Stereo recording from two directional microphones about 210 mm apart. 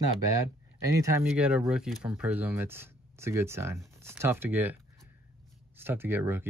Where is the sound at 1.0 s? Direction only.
10° right (ahead or behind).